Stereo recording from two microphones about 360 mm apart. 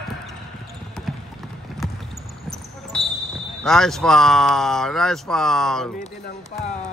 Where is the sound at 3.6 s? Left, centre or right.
Centre.